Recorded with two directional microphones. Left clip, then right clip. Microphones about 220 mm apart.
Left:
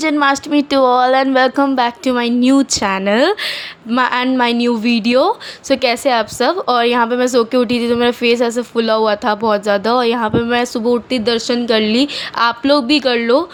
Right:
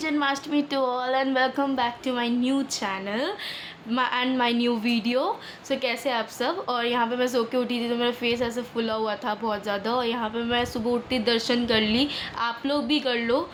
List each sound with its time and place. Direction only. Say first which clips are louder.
0.0 s speech: left 11 dB; 35° left (ahead or behind)